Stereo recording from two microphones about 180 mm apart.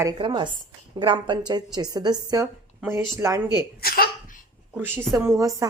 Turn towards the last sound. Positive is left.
turn(degrees=-20)  # may be behind; listen again after turning